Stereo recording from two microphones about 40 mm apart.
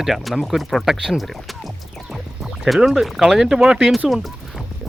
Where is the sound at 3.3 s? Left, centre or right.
Centre.